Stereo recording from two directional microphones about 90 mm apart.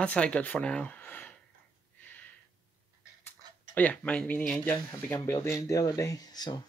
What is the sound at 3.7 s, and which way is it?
Speech, 15° left (ahead or behind).